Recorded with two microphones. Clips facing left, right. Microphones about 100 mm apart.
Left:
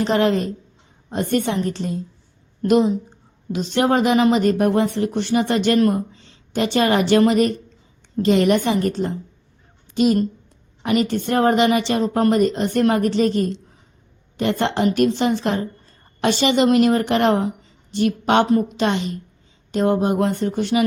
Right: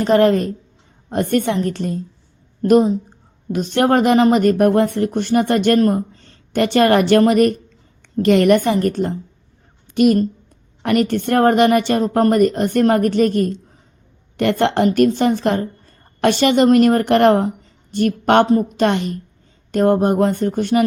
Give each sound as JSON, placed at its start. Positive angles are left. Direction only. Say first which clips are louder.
{"t": 0.0, "sound": "a woman's voice", "louder": "right 4 dB", "side_deg": -50}